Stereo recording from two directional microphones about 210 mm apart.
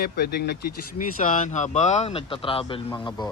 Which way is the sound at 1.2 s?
40° left (ahead or behind).